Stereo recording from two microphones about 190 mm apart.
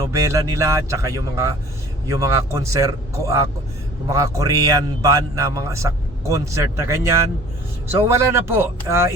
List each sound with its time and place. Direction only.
0.0 s a man's voice: 15° right (ahead or behind)